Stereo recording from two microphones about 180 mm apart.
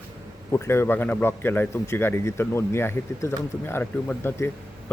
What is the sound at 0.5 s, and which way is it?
A man's voice, 15° left (ahead or behind).